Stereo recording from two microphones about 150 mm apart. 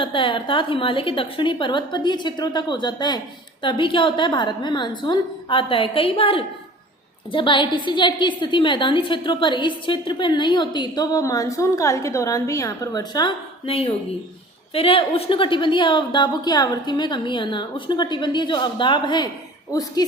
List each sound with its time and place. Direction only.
0.0 s a woman's voice: 35° left (ahead or behind)
13.7 s a woman's voice: 40° left (ahead or behind)